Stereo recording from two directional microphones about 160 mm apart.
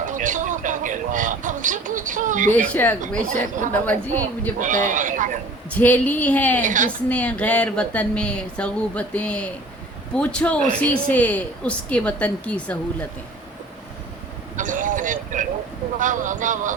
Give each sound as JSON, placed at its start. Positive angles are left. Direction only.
{"t": 0.0, "sound": "music", "side_deg": -55}
{"t": 2.5, "sound": "speech", "side_deg": 10}
{"t": 4.6, "sound": "speech", "side_deg": -55}
{"t": 5.7, "sound": "speech", "side_deg": 10}
{"t": 6.6, "sound": "speech", "side_deg": -55}
{"t": 7.1, "sound": "speech", "side_deg": 10}
{"t": 14.5, "sound": "vehicle", "side_deg": -55}
{"t": 16.0, "sound": "speech", "side_deg": -55}